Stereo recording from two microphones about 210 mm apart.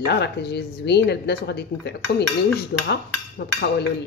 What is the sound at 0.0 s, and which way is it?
Speech, 55° left (ahead or behind).